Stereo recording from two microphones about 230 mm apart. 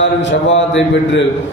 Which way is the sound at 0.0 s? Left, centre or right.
Left.